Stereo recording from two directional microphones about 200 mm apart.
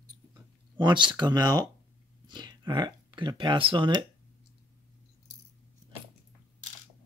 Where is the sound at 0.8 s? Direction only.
25° right (ahead or behind).